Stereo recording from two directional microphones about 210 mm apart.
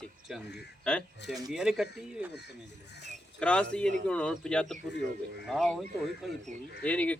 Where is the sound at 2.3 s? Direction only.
55° left (ahead or behind).